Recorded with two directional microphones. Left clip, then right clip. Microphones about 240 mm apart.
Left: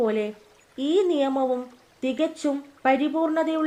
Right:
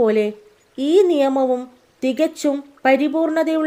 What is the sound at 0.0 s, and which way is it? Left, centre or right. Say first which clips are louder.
A woman's voice: right 8 dB; right.